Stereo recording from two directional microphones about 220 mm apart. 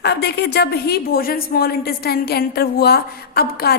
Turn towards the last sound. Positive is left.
turn(degrees=45)  # may be behind; listen again after turning